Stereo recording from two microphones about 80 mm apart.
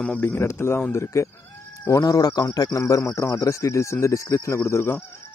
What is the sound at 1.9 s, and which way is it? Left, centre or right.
Speech, left.